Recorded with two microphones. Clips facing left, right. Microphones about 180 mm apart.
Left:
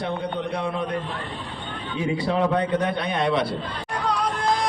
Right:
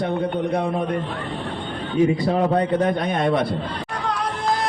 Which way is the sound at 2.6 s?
45° right (ahead or behind).